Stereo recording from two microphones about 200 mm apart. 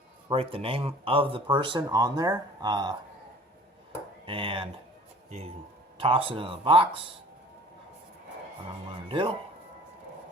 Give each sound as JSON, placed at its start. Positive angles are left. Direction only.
{"t": 0.3, "sound": "speech", "side_deg": -30}
{"t": 4.3, "sound": "speech", "side_deg": -25}
{"t": 6.0, "sound": "speech", "side_deg": -25}
{"t": 9.0, "sound": "speech", "side_deg": -25}